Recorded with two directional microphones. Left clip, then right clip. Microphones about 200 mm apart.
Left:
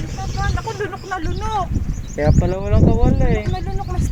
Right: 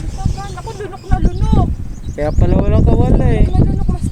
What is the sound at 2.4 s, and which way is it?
Speech, 15° right (ahead or behind).